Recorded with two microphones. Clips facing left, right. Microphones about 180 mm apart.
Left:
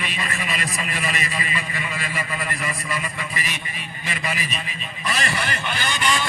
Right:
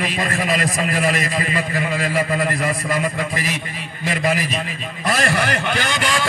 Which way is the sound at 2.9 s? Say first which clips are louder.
Right 8 dB; 90° right.